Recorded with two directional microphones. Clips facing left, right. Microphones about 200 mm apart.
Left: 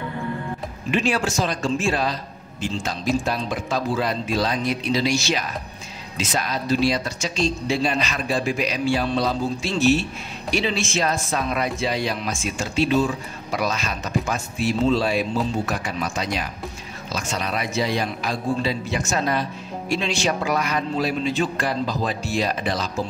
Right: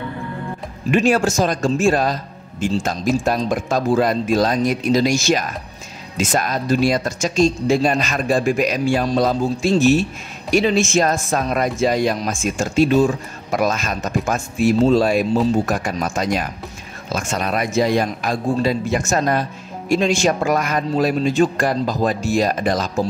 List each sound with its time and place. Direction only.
0.9 s speech: 45° right (ahead or behind)